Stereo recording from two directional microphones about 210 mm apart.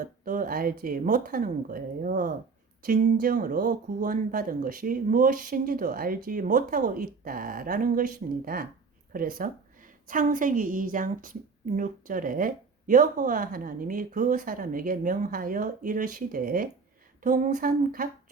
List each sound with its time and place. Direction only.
0.0 s speech: 40° right (ahead or behind)